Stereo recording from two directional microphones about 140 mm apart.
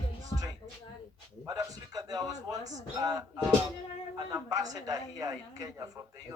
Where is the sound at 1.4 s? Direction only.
25° right (ahead or behind).